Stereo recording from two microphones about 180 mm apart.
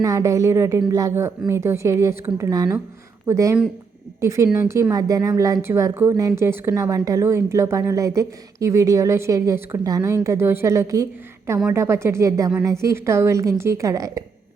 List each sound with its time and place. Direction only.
0.0 s a woman's voice: 20° right (ahead or behind)